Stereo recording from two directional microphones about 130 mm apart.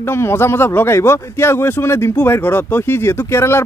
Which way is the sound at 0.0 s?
20° left (ahead or behind).